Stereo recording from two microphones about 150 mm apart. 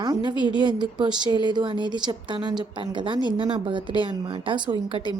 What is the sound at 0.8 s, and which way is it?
A woman's voice, 30° right (ahead or behind).